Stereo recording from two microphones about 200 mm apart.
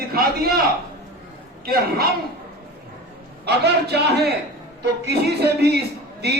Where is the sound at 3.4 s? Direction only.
55° right (ahead or behind).